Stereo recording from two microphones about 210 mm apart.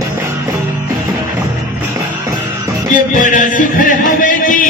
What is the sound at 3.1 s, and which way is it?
Music, 40° left (ahead or behind).